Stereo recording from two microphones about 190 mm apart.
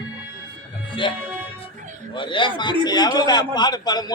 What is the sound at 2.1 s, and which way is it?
A man's voice, 25° left (ahead or behind).